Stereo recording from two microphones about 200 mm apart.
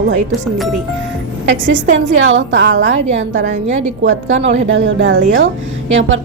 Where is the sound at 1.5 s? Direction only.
70° right (ahead or behind).